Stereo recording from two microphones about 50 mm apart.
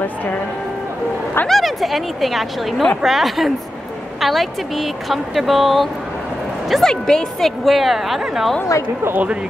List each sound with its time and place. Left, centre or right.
1.5 s speech: centre
7.6 s speech: centre
9.1 s speech: right